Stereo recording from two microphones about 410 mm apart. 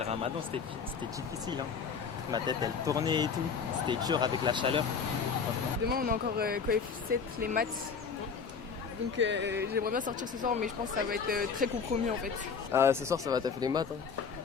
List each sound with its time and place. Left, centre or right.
2.3 s speech: centre
5.9 s speech: right
9.1 s speech: right
12.7 s speech: centre